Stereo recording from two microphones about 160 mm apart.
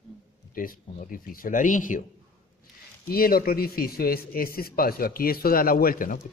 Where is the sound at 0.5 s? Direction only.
60° left (ahead or behind).